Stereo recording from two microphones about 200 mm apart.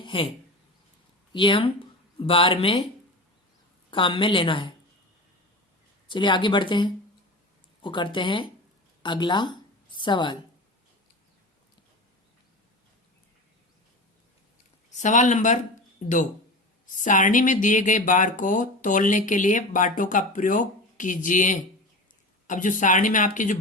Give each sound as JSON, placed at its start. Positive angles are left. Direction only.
{"t": 0.0, "sound": "a sound", "side_deg": 25}
{"t": 1.3, "sound": "speech", "side_deg": 25}
{"t": 3.9, "sound": "speech", "side_deg": 25}
{"t": 6.1, "sound": "speech", "side_deg": 25}
{"t": 14.8, "sound": "speech", "side_deg": 35}